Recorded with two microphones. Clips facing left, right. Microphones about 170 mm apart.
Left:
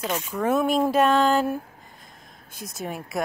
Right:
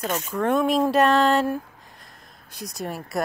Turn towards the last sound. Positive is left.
turn(degrees=0)  # may be behind; listen again after turning